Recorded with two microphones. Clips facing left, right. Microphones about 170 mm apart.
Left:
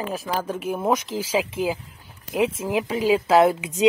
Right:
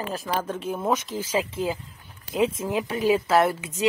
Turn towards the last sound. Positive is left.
turn(degrees=15)  # may be behind; listen again after turning